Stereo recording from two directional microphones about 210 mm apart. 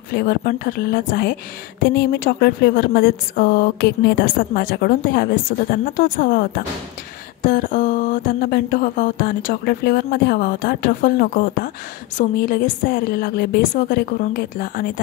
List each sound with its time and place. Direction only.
0.1 s a woman's voice: 45° left (ahead or behind)